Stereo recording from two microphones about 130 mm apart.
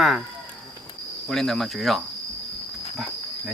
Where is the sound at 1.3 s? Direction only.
Centre (ahead or behind).